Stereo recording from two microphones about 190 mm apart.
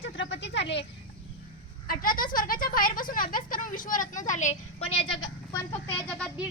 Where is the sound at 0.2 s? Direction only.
70° left (ahead or behind).